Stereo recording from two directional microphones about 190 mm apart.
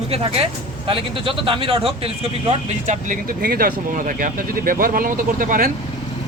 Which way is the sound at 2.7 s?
40° right (ahead or behind).